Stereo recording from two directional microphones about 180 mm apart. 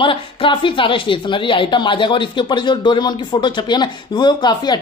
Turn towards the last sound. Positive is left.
turn(degrees=25)  # may be behind; listen again after turning